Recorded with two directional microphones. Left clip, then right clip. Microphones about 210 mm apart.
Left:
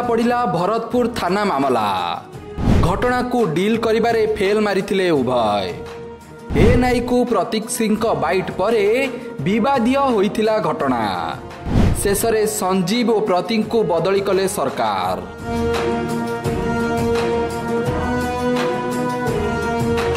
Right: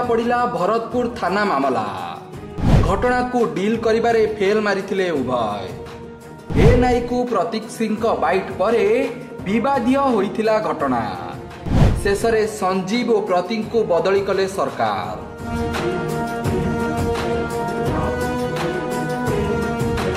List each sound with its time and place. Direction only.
0.1 s a man's voice: 40° left (ahead or behind)
6.8 s a man's voice: 40° left (ahead or behind)